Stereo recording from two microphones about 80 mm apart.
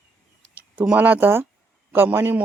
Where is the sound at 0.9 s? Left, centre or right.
Right.